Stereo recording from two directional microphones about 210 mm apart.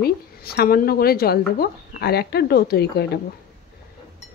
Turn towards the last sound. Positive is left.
turn(degrees=50)  # may be behind; listen again after turning